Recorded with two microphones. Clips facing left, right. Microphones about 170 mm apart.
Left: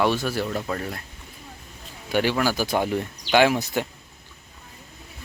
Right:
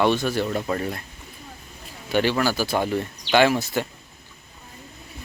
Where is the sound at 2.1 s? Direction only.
10° left (ahead or behind).